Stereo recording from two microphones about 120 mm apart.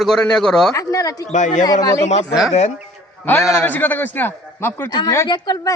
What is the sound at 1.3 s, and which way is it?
Speech, 90° left.